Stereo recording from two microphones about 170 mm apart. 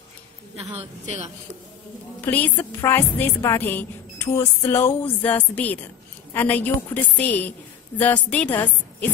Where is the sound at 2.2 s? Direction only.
10° left (ahead or behind).